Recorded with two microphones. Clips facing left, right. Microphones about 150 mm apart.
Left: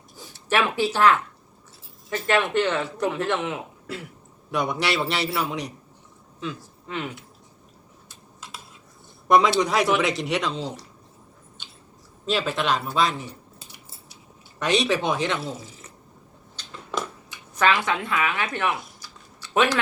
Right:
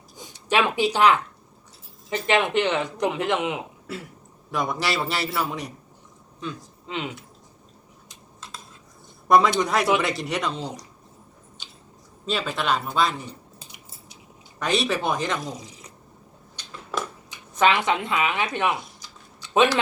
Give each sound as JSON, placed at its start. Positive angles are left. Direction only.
{"t": 0.2, "sound": "speech", "side_deg": -15}
{"t": 4.5, "sound": "a man's voice", "side_deg": 0}
{"t": 6.6, "sound": "speech", "side_deg": -20}
{"t": 8.4, "sound": "cutlery", "side_deg": 10}
{"t": 9.2, "sound": "a man's voice", "side_deg": 0}
{"t": 12.2, "sound": "a man's voice", "side_deg": 0}
{"t": 14.6, "sound": "a man's voice", "side_deg": 0}
{"t": 15.4, "sound": "speech", "side_deg": -15}
{"t": 17.5, "sound": "a woman's voice", "side_deg": -20}
{"t": 19.0, "sound": "a sound", "side_deg": -20}